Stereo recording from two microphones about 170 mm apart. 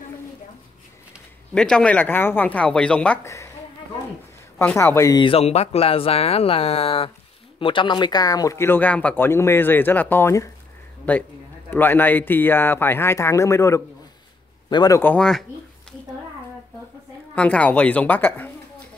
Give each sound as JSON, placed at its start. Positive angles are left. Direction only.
{"t": 1.5, "sound": "speech", "side_deg": 5}
{"t": 4.6, "sound": "speech", "side_deg": 15}
{"t": 17.4, "sound": "speech", "side_deg": 5}